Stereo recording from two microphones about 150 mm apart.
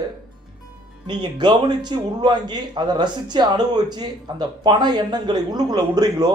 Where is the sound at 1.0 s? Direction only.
30° right (ahead or behind).